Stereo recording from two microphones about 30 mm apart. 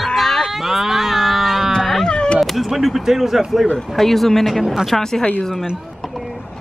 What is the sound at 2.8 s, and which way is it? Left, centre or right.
Speech, centre.